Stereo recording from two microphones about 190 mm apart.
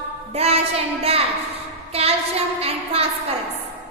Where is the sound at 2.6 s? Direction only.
30° right (ahead or behind).